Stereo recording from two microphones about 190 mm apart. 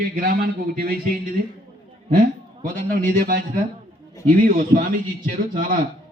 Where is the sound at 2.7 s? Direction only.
45° right (ahead or behind).